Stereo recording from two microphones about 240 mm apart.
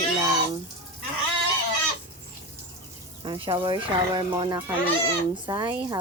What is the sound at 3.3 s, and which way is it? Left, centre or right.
Speech, right.